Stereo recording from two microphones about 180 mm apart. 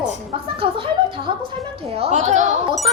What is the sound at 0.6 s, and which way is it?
Speech, 30° right (ahead or behind).